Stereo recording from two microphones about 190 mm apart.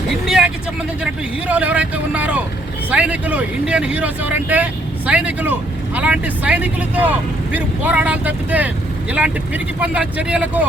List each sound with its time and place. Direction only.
0.3 s vehicle: 5° right (ahead or behind)
1.5 s speech: 5° right (ahead or behind)